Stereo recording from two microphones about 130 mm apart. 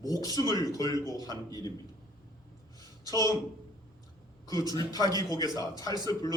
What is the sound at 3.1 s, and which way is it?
Speech, 30° left (ahead or behind).